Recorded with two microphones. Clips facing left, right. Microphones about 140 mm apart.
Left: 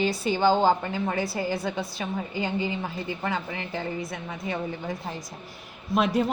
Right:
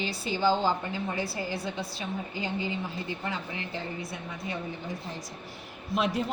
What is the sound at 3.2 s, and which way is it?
Speech, 80° left.